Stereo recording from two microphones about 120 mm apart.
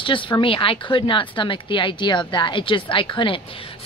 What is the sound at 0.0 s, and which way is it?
Speech, 45° left (ahead or behind).